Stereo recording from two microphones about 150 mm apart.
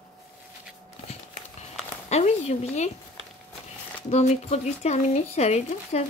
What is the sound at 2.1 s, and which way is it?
Speech, 45° left (ahead or behind).